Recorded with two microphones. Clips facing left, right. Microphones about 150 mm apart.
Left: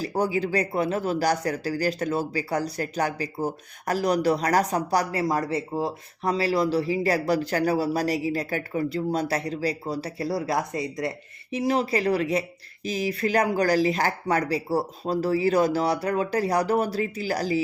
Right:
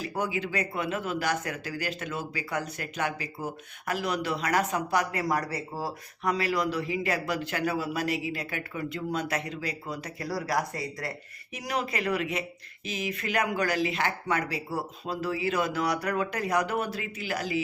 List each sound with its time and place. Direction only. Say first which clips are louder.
0.0 s speech: left 6 dB; 35° left (ahead or behind)